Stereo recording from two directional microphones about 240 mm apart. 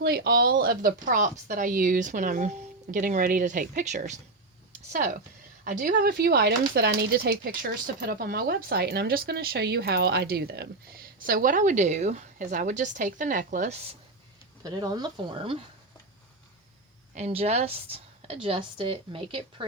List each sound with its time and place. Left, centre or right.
0.0 s speech: right
14.6 s speech: centre
17.2 s a woman's voice: right